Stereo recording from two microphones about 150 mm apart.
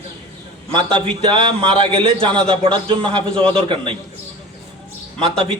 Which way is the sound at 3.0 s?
10° left (ahead or behind).